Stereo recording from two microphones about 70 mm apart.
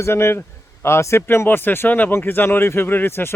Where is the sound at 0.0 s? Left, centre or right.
Left.